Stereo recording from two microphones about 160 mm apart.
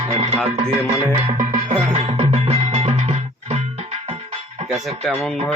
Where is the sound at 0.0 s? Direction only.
40° right (ahead or behind).